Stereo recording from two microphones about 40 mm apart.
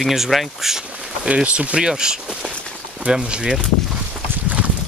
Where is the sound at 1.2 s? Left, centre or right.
Right.